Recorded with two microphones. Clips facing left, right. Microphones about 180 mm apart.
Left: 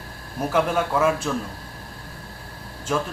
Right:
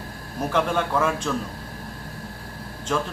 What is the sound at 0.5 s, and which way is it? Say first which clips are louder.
Speech: left 1 dB; 5° left (ahead or behind).